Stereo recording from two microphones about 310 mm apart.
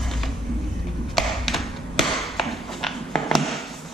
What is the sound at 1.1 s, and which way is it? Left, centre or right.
Tap, centre.